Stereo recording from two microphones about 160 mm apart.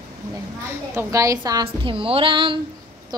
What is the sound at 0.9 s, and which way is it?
A woman's voice, 20° right (ahead or behind).